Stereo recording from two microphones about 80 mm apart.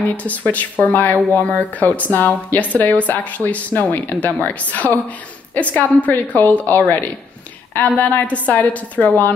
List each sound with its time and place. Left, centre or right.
0.1 s speech: centre